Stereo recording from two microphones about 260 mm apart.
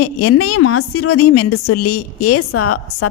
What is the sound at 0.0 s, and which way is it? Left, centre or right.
A woman's voice, left.